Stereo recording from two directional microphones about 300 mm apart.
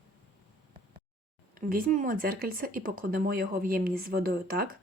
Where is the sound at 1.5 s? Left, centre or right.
Right.